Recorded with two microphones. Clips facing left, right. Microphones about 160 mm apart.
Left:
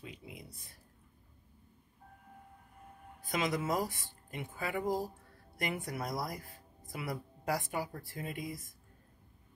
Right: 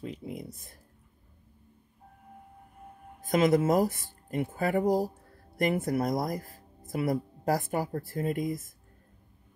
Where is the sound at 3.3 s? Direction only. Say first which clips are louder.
Right 10 dB; 45° right (ahead or behind).